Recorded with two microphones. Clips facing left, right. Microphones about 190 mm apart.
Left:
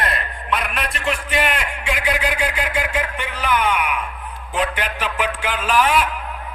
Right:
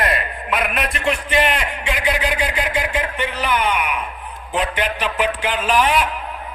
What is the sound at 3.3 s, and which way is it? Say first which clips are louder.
Speech: left 2 dB; 10° right (ahead or behind).